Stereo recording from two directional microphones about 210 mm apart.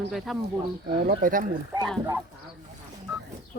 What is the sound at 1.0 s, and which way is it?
Speech, 40° right (ahead or behind).